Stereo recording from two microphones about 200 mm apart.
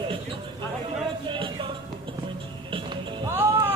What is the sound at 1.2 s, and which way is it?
Music, 25° right (ahead or behind).